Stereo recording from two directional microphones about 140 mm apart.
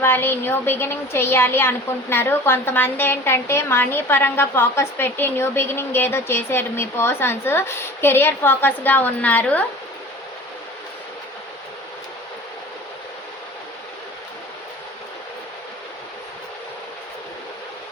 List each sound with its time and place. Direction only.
0.0 s speech: 15° left (ahead or behind)